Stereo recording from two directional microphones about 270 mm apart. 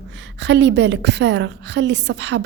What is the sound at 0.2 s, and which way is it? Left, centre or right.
A woman's voice, right.